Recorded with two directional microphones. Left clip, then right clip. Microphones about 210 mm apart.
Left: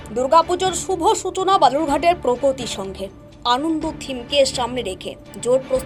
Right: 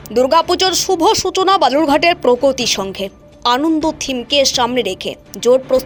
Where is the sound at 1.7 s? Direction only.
55° right (ahead or behind).